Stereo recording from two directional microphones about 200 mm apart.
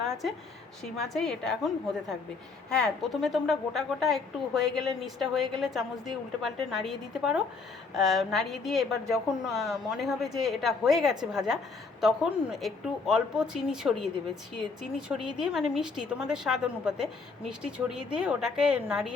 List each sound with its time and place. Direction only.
0.1 s a woman's voice: centre (ahead or behind)